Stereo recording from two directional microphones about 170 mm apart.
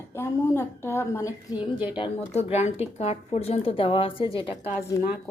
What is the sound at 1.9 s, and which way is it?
Speech, 35° left (ahead or behind).